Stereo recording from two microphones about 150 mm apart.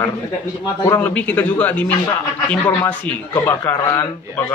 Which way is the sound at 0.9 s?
10° left (ahead or behind).